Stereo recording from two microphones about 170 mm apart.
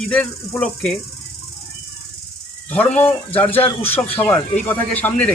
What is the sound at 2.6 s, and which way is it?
Speech, 10° left (ahead or behind).